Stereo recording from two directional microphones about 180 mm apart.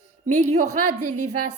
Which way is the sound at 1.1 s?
40° right (ahead or behind).